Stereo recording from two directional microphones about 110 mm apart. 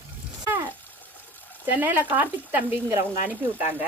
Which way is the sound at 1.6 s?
20° right (ahead or behind).